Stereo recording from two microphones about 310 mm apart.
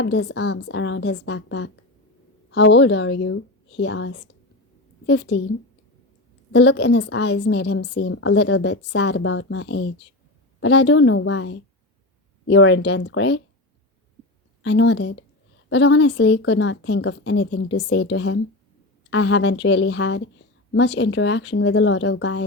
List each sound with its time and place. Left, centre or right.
0.0 s a woman's voice: left
6.5 s a woman's voice: left
14.6 s a woman's voice: left